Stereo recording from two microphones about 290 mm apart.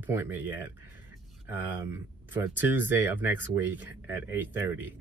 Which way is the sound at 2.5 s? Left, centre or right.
Centre.